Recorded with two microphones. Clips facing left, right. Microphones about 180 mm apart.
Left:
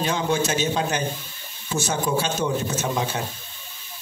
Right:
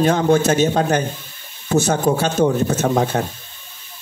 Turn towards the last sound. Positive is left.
turn(degrees=-55)  # may be behind; listen again after turning